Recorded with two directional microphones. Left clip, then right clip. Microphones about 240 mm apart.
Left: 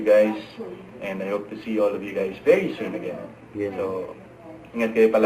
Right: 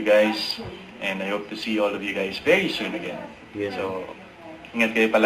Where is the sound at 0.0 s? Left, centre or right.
Centre.